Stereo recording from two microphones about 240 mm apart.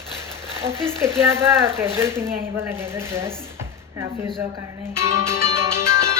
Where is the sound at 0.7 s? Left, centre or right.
Centre.